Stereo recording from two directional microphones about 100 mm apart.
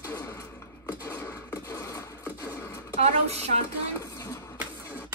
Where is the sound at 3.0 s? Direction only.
90° right.